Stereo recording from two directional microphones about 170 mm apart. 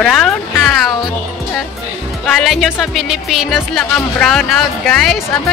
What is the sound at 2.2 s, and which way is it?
Speech, centre (ahead or behind).